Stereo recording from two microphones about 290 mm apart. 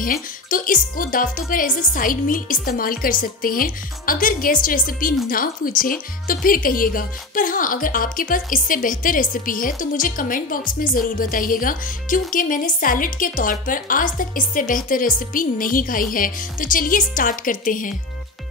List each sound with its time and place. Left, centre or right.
0.0 s speech: left